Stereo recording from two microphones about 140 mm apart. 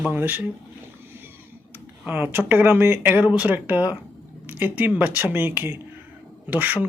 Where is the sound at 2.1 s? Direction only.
15° right (ahead or behind).